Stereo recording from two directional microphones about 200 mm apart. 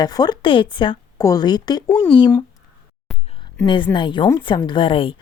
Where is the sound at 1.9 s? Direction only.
5° left (ahead or behind).